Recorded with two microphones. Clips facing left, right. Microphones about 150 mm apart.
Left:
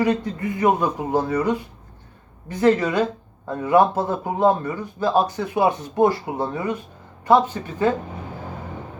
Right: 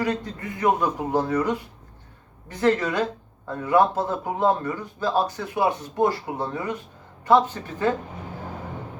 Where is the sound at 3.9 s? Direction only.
5° left (ahead or behind).